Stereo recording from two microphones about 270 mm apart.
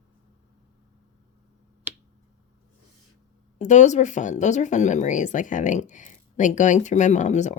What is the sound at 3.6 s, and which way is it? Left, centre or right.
Speech, left.